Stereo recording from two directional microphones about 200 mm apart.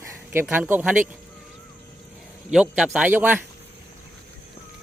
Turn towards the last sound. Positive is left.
turn(degrees=-10)  # may be behind; listen again after turning